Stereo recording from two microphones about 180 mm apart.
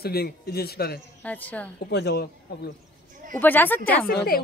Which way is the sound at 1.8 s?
65° left (ahead or behind).